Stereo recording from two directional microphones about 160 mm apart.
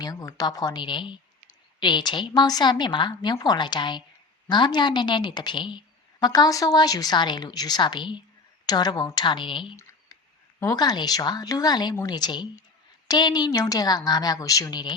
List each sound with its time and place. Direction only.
0.0 s a woman's voice: 20° left (ahead or behind)